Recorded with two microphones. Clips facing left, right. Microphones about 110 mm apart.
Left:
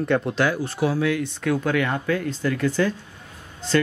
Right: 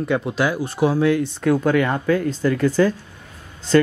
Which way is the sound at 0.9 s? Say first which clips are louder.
Right 5 dB; 35° right (ahead or behind).